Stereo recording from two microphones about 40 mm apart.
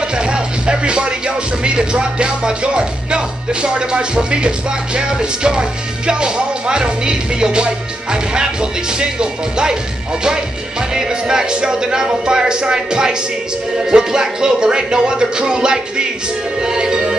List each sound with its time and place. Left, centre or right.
0.2 s music: right
11.0 s music: centre